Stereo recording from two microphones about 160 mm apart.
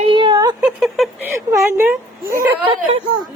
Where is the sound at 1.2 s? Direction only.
15° right (ahead or behind).